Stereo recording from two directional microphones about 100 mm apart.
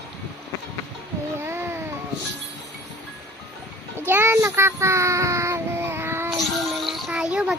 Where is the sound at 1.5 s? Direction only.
25° right (ahead or behind).